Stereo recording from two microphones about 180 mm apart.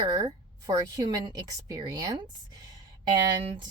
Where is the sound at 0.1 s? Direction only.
20° right (ahead or behind).